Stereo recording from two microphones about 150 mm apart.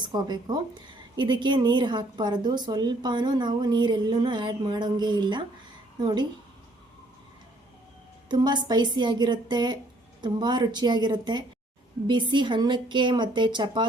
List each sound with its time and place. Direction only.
0.0 s a woman's voice: 30° right (ahead or behind)
8.3 s a woman's voice: 30° right (ahead or behind)